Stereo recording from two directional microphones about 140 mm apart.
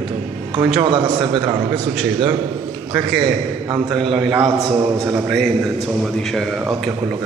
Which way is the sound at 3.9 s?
5° right (ahead or behind).